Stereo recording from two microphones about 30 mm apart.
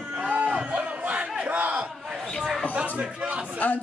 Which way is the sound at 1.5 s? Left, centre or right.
Right.